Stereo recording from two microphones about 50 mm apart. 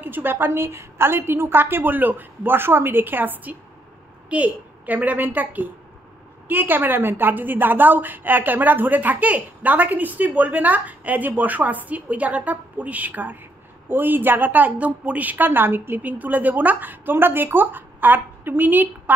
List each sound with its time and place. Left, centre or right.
0.0 s a woman's voice: right
16.0 s a woman's voice: right